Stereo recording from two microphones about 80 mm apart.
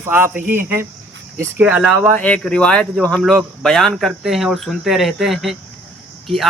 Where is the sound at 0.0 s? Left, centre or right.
Right.